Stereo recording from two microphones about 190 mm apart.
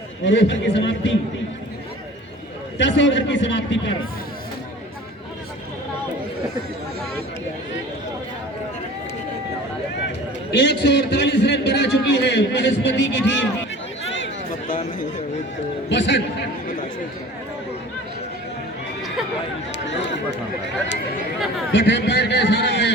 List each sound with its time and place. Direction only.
0.3 s a man's voice: 70° left (ahead or behind)
2.7 s a man's voice: 70° left (ahead or behind)
10.5 s a man's voice: 65° left (ahead or behind)
15.9 s a man's voice: 65° left (ahead or behind)
19.7 s a sound: 70° left (ahead or behind)
21.7 s a man's voice: 70° left (ahead or behind)